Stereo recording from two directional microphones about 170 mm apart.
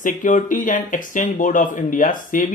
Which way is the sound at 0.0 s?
50° left (ahead or behind).